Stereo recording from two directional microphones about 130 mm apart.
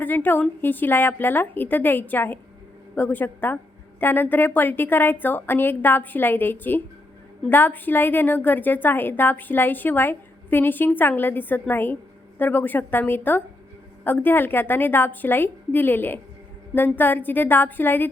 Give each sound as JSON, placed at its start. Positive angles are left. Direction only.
{"t": 0.0, "sound": "a woman's voice", "side_deg": 15}